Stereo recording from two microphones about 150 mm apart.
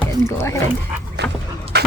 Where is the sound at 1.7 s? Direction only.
90° right.